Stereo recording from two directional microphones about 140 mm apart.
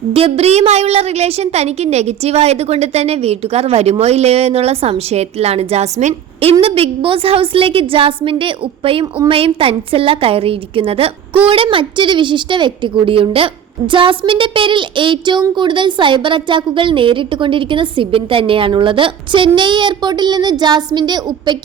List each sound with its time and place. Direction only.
0.1 s a woman's voice: 45° right (ahead or behind)